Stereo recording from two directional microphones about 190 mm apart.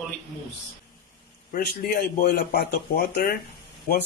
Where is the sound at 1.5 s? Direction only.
55° left (ahead or behind).